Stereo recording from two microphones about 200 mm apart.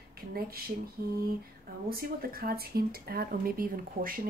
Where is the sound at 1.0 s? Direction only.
45° right (ahead or behind).